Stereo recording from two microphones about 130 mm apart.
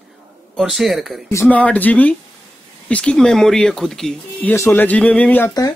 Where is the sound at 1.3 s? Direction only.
15° left (ahead or behind).